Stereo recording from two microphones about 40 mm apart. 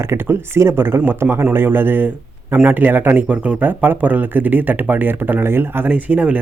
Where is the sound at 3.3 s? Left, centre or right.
Right.